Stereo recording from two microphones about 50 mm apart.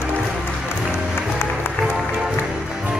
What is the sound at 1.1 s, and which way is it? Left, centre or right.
Music, left.